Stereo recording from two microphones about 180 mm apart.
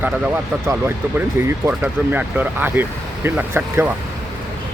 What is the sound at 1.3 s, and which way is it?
Speech, 10° right (ahead or behind).